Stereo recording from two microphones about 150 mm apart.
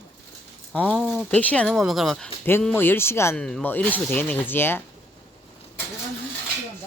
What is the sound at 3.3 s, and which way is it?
Speech, 5° left (ahead or behind).